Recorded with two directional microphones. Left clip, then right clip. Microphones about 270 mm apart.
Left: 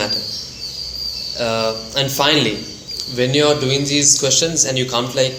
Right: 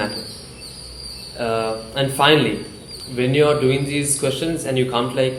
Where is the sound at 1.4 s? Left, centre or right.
Left.